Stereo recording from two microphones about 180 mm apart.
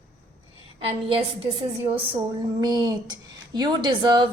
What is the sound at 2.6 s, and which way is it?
A woman's voice, 20° right (ahead or behind).